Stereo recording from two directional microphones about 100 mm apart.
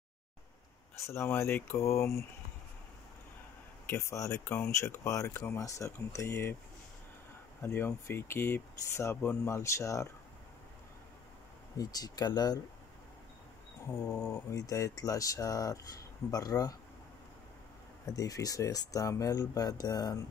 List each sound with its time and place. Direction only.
0.9 s speech: 30° left (ahead or behind)
3.9 s speech: 25° left (ahead or behind)
7.6 s speech: 25° left (ahead or behind)
11.7 s speech: 40° left (ahead or behind)
13.8 s speech: 30° left (ahead or behind)
18.1 s speech: 35° left (ahead or behind)